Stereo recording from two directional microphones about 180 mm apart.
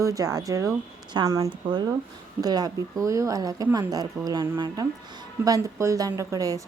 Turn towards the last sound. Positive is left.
turn(degrees=-20)  # may be behind; listen again after turning